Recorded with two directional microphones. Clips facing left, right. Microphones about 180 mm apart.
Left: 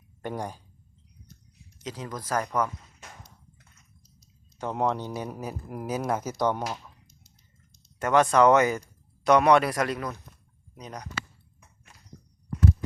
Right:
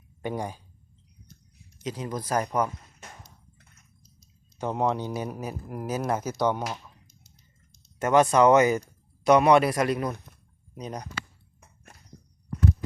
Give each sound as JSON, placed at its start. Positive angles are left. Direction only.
{"t": 0.2, "sound": "speech", "side_deg": -5}
{"t": 1.8, "sound": "speech", "side_deg": -15}
{"t": 4.5, "sound": "a man's voice", "side_deg": -5}
{"t": 8.1, "sound": "speech", "side_deg": -10}
{"t": 10.8, "sound": "speech", "side_deg": -25}